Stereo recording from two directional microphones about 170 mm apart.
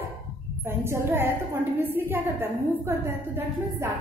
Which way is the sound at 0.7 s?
15° right (ahead or behind).